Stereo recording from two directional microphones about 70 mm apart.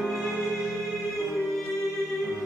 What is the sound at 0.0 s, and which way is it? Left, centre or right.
Music, centre.